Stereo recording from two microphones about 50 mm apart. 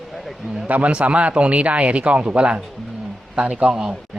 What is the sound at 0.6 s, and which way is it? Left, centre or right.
Speech, right.